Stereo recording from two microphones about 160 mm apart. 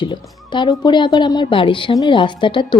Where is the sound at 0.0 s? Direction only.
30° left (ahead or behind).